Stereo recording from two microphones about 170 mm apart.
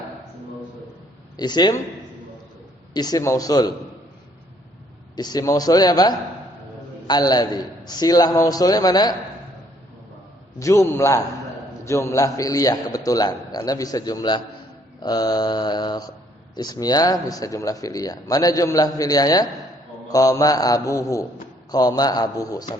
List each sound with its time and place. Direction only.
1.4 s speech: 25° left (ahead or behind)
2.9 s speech: 25° left (ahead or behind)
5.1 s speech: 25° left (ahead or behind)
10.6 s a man's voice: 15° left (ahead or behind)